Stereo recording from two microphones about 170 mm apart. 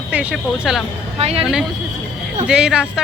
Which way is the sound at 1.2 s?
35° right (ahead or behind).